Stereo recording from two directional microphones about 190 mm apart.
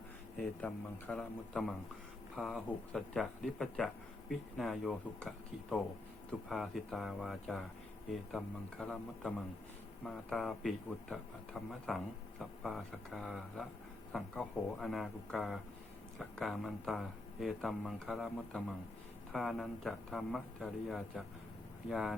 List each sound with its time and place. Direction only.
0.3 s a man's voice: 5° left (ahead or behind)
6.5 s a man's voice: centre (ahead or behind)